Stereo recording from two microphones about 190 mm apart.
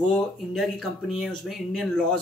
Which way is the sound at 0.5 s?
Centre (ahead or behind).